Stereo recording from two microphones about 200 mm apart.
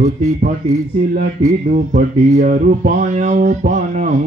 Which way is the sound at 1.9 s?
40° right (ahead or behind).